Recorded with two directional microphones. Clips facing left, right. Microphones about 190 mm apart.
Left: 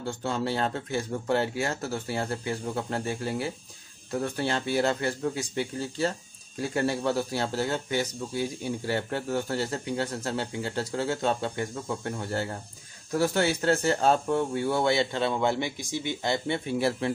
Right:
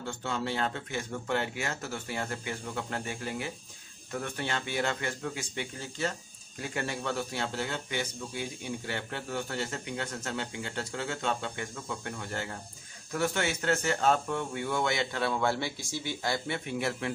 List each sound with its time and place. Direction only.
0.0 s speech: 35° left (ahead or behind)